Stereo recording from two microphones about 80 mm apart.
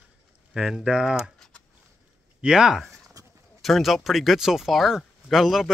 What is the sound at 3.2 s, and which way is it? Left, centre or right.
Clip-clop, right.